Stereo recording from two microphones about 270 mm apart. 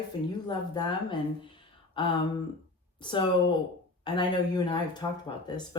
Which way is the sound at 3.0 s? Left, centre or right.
Centre.